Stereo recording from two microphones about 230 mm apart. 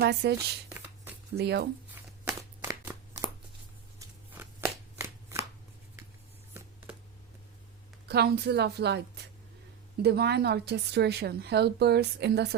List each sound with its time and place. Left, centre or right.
0.0 s speech: right
1.4 s speech: right
2.0 s a sound: centre
4.4 s shuffling cards: centre
8.0 s speech: right
10.0 s speech: right